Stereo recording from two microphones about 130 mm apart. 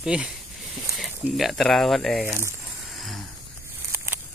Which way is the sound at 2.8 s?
Centre (ahead or behind).